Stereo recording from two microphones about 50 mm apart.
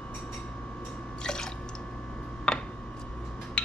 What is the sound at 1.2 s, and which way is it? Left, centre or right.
Drip, centre.